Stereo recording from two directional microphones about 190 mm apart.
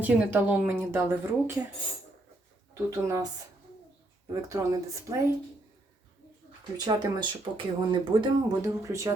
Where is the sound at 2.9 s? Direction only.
15° right (ahead or behind).